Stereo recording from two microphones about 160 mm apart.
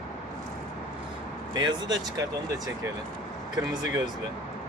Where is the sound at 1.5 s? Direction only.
25° right (ahead or behind).